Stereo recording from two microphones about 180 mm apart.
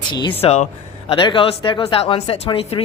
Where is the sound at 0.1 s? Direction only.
25° left (ahead or behind).